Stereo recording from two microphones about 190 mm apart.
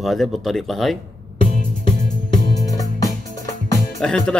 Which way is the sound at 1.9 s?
40° left (ahead or behind).